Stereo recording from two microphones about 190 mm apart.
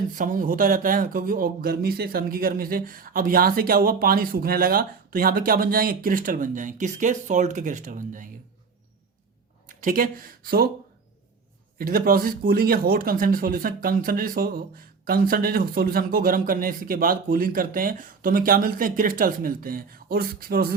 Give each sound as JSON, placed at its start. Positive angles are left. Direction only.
{"t": 0.2, "sound": "speech", "side_deg": -45}
{"t": 9.6, "sound": "speech", "side_deg": -45}
{"t": 11.8, "sound": "speech", "side_deg": -50}